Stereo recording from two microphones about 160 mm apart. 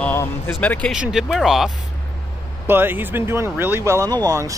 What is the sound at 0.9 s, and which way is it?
Speech, 5° right (ahead or behind).